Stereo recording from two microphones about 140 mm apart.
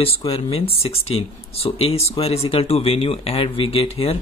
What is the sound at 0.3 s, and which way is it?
Speech, 45° left (ahead or behind).